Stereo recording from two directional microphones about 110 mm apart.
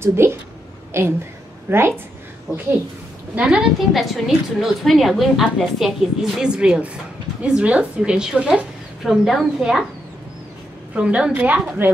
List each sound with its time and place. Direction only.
0.0 s a woman's voice: 25° right (ahead or behind)
3.3 s a woman's voice: 5° right (ahead or behind)
11.0 s a woman's voice: 10° right (ahead or behind)